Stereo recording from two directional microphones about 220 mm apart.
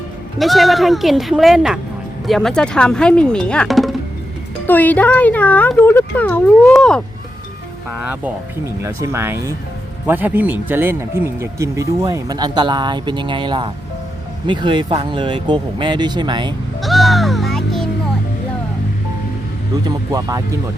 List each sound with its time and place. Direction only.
0.3 s speech: centre (ahead or behind)
7.9 s speech: 5° right (ahead or behind)
16.8 s music: centre (ahead or behind)
19.8 s speech: 15° right (ahead or behind)